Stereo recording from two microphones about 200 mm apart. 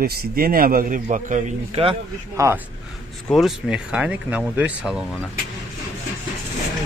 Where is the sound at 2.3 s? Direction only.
15° right (ahead or behind).